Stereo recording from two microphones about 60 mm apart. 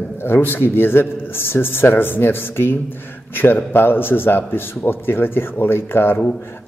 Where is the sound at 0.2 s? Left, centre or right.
Left.